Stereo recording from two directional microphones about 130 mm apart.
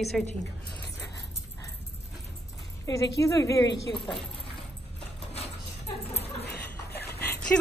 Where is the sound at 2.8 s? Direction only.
25° left (ahead or behind).